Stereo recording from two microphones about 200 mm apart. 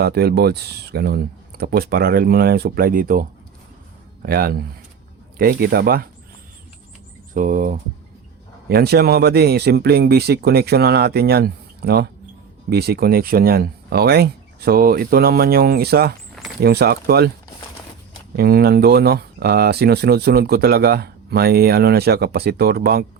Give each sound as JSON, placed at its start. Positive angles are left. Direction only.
{"t": 0.0, "sound": "speech", "side_deg": -55}
{"t": 4.3, "sound": "speech", "side_deg": -50}
{"t": 7.3, "sound": "speech", "side_deg": -40}
{"t": 8.7, "sound": "speech", "side_deg": -50}
{"t": 18.3, "sound": "speech", "side_deg": -50}